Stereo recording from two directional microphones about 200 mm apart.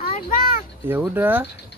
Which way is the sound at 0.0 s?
45° left (ahead or behind).